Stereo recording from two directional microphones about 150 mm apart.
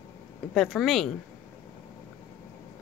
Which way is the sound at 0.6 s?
Centre (ahead or behind).